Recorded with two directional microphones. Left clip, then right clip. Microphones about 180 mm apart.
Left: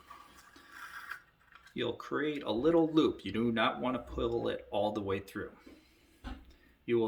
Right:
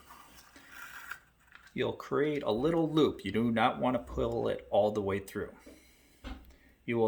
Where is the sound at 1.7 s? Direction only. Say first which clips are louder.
Right 3 dB; 50° right (ahead or behind).